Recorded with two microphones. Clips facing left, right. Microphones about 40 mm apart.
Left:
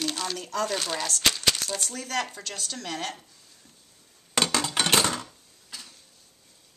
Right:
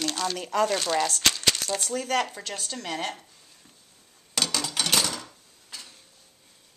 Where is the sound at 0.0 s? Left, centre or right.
Centre.